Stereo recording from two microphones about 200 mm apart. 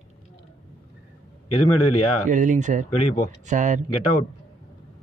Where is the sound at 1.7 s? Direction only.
90° left.